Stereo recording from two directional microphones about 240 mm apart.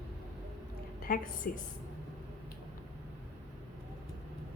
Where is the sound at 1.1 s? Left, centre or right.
Left.